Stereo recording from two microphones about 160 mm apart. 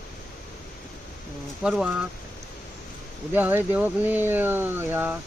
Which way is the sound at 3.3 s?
10° right (ahead or behind).